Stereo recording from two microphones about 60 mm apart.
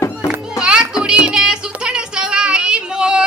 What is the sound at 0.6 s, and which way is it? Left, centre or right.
Music, centre.